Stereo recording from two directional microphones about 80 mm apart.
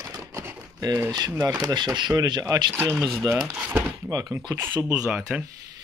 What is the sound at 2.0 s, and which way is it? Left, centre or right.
Speech, right.